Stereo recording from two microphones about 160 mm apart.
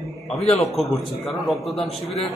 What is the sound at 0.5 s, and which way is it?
A man's voice, centre (ahead or behind).